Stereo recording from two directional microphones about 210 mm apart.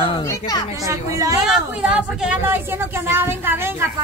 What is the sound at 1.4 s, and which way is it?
A woman's voice, 5° right (ahead or behind).